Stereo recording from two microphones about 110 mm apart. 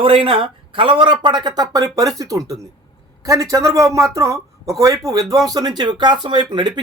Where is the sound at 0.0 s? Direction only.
55° right (ahead or behind).